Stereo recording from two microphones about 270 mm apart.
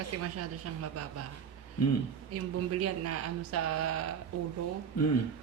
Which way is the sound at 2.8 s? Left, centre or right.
Right.